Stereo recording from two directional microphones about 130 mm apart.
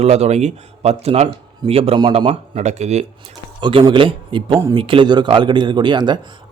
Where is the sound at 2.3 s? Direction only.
60° right (ahead or behind).